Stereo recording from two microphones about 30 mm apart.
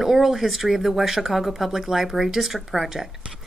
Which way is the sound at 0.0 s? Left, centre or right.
Centre.